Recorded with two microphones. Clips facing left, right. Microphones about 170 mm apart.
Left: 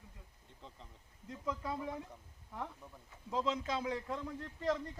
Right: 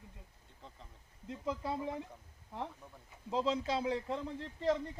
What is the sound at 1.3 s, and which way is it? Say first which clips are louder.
Speech: right 2 dB; 30° right (ahead or behind).